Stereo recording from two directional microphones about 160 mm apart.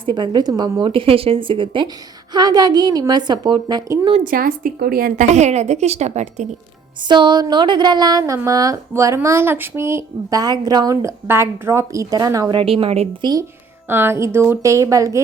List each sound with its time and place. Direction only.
0.0 s a woman's voice: 30° right (ahead or behind)
4.2 s a woman's voice: 60° right (ahead or behind); by 6.5 s 45° right (ahead or behind)
7.1 s speech: 25° right (ahead or behind)
13.8 s a woman's voice: 15° right (ahead or behind)